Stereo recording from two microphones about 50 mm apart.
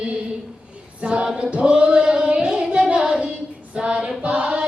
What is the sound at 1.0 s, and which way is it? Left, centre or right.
Choir, centre.